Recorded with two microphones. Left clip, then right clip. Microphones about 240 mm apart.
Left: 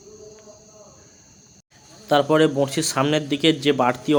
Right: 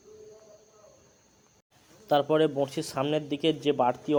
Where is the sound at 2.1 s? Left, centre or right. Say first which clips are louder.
Left 6 dB; centre.